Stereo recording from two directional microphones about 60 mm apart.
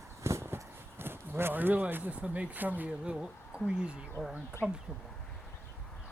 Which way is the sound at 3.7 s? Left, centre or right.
Centre.